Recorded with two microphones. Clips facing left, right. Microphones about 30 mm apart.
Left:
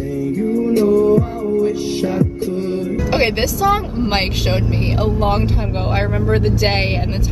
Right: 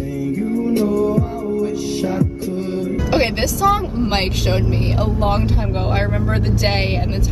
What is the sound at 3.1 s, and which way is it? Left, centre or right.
Music, centre.